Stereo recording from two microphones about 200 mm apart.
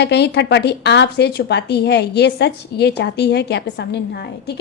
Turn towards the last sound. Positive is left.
turn(degrees=55)  # may be behind; listen again after turning